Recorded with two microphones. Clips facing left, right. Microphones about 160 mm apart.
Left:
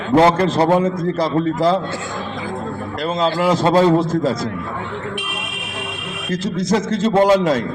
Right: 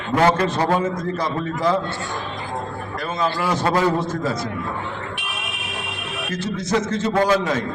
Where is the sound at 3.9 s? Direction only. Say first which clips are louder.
Left 6 dB; 90° left.